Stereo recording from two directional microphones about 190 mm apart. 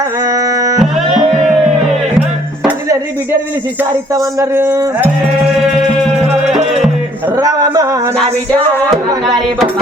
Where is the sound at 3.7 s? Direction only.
15° right (ahead or behind).